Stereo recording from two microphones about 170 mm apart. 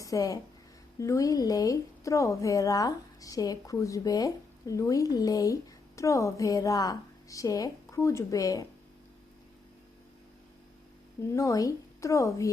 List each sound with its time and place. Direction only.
0.0 s a woman's voice: 20° left (ahead or behind)
11.3 s speech: 20° left (ahead or behind)